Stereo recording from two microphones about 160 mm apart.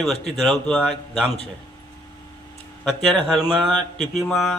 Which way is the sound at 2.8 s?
5° left (ahead or behind).